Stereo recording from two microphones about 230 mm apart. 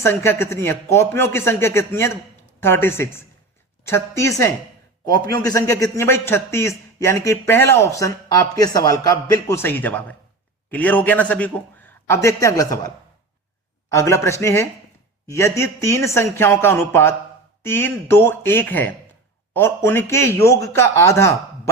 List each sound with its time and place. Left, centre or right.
0.0 s a man's voice: centre
13.9 s a man's voice: centre